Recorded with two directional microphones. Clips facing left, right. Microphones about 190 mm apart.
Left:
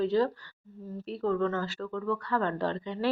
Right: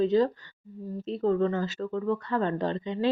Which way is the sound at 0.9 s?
20° right (ahead or behind).